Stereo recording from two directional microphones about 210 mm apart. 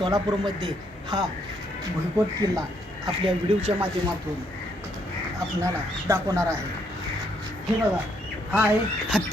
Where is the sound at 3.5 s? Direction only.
25° right (ahead or behind).